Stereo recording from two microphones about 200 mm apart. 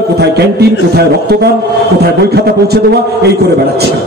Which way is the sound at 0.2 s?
55° right (ahead or behind).